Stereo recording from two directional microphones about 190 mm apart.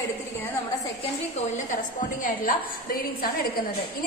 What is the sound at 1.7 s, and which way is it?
A woman's voice, 45° left (ahead or behind).